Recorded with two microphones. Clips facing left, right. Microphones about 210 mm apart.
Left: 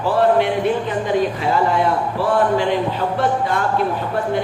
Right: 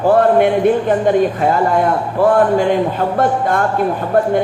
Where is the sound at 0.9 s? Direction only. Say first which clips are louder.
Right 6 dB; 50° right (ahead or behind).